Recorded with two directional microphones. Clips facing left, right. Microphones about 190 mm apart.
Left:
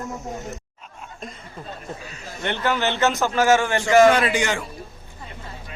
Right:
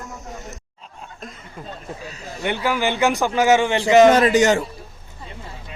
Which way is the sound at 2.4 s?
10° right (ahead or behind).